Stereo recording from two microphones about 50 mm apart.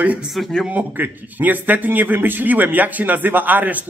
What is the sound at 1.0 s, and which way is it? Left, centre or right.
A man's voice, right.